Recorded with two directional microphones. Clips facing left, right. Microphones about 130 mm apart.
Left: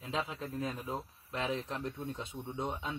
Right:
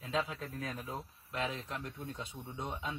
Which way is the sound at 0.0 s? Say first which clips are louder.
Right 1 dB; 25° left (ahead or behind).